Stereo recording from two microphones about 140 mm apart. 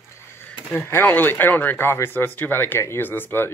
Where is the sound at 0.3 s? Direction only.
15° left (ahead or behind).